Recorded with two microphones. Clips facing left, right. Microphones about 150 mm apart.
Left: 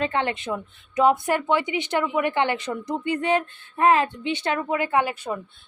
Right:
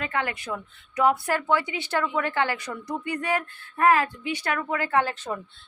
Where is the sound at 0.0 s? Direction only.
25° left (ahead or behind).